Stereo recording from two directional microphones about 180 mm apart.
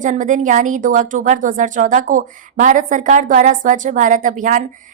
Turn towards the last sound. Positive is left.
turn(degrees=-45)  # may be behind; listen again after turning